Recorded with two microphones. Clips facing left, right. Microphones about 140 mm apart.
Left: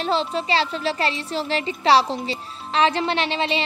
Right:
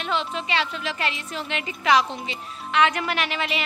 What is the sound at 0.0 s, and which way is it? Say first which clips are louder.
A woman's voice: left 5 dB; 35° left (ahead or behind).